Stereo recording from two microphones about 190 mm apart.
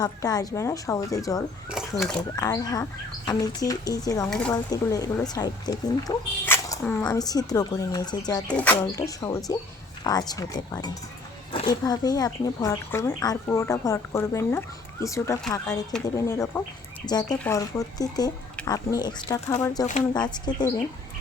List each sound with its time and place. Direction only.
0.0 s speech: 20° left (ahead or behind)
1.7 s speech: centre (ahead or behind)
2.3 s speech: 20° left (ahead or behind)
8.5 s speech: 10° left (ahead or behind)